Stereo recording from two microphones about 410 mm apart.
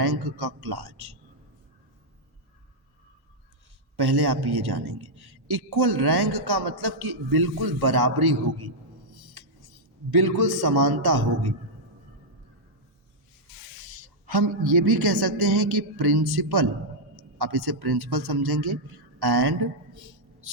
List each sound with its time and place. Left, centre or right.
0.0 s a man's voice: right
3.9 s a man's voice: right
10.1 s a man's voice: right
14.3 s a man's voice: right